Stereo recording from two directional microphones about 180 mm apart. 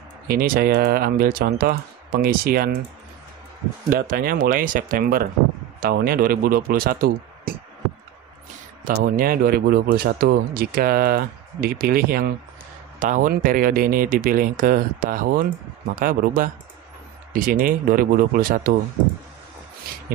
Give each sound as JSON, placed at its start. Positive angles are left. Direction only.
{"t": 0.3, "sound": "speech", "side_deg": -60}
{"t": 3.9, "sound": "speech", "side_deg": -55}
{"t": 8.8, "sound": "speech", "side_deg": -55}